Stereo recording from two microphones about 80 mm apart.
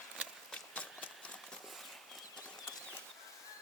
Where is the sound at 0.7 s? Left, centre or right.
Centre.